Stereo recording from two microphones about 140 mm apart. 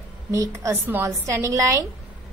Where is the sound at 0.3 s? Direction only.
20° right (ahead or behind).